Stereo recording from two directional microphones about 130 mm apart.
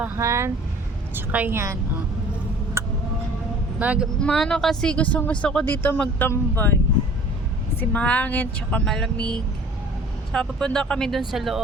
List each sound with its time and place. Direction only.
0.0 s a woman's voice: 20° right (ahead or behind)
2.8 s tick-tock: 20° right (ahead or behind)
3.8 s a woman's voice: 10° right (ahead or behind)
4.2 s speech: 5° left (ahead or behind)
7.8 s speech: 10° left (ahead or behind)